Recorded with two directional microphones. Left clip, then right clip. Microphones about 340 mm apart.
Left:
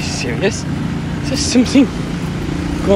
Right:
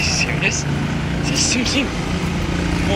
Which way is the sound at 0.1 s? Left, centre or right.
Centre.